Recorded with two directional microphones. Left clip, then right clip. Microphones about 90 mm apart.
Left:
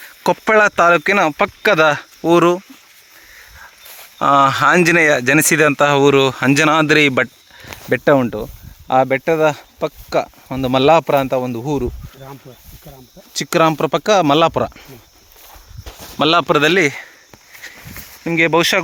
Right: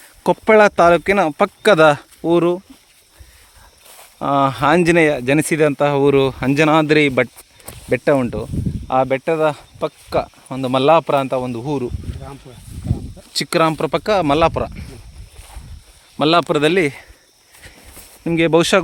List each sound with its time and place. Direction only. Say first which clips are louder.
0.0 s a sound: left 1 dB; 40° right (ahead or behind)
0.4 s speech: right 1 dB; 20° right (ahead or behind)
1.4 s speech: right 1 dB; 85° right
2.2 s speech: left 3 dB; 15° right (ahead or behind)
4.2 s speech: left 4 dB; 15° right (ahead or behind)
7.9 s speech: left 2 dB; 20° left (ahead or behind)
11.6 s speech: left 2 dB; 30° left (ahead or behind)
13.3 s speech: even; 5° right (ahead or behind)
13.7 s speech: left 3 dB; 20° left (ahead or behind)
14.3 s speech: left 2 dB; 35° left (ahead or behind)
14.5 s speech: left 4 dB; 45° left (ahead or behind)
16.1 s speech: left 2 dB; 5° right (ahead or behind); by 17.1 s 20° right (ahead or behind)
18.2 s speech: left 2 dB; 90° right